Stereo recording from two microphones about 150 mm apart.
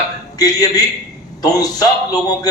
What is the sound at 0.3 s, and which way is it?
A man's voice, 25° left (ahead or behind).